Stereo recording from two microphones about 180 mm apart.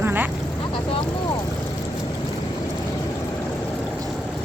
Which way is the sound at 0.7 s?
30° left (ahead or behind).